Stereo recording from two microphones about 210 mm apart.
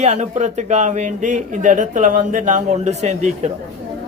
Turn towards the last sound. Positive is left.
turn(degrees=-35)  # may be behind; listen again after turning